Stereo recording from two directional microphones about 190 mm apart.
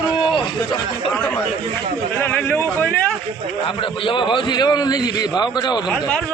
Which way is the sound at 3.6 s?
25° left (ahead or behind).